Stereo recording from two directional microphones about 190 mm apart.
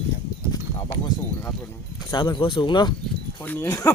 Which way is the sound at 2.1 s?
25° left (ahead or behind).